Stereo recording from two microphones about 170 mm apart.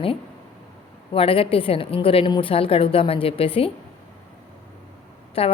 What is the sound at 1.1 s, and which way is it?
A woman's voice, 35° left (ahead or behind).